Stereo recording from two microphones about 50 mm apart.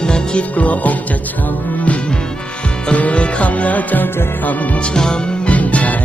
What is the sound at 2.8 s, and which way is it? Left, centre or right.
Music, left.